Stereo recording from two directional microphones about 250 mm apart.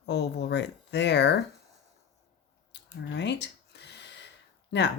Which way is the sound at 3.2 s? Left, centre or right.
Left.